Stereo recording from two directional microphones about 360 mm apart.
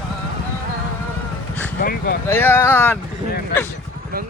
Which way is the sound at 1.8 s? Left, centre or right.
Left.